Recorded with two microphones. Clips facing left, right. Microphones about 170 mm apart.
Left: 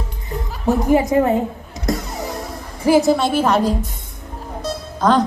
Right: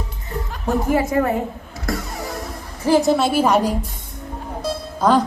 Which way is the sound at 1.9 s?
20° left (ahead or behind).